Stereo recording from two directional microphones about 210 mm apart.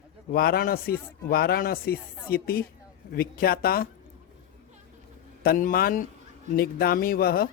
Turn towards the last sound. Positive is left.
turn(degrees=45)  # may be behind; listen again after turning